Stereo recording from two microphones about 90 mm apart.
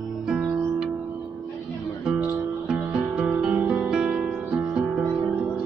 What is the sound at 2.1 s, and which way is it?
Music, 10° right (ahead or behind).